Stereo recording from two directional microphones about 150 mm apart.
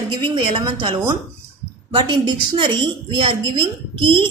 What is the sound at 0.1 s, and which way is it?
A woman's voice, 30° right (ahead or behind).